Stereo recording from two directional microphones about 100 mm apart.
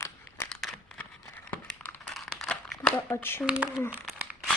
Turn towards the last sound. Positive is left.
turn(degrees=5)  # may be behind; listen again after turning